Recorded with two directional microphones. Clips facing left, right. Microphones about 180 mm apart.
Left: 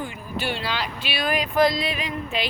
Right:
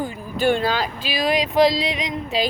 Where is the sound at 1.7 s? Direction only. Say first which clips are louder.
Right 3 dB; 90° right.